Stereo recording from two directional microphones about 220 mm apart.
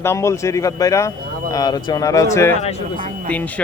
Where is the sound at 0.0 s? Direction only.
15° left (ahead or behind).